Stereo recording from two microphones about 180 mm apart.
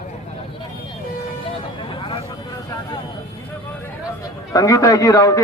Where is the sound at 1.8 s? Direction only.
25° left (ahead or behind).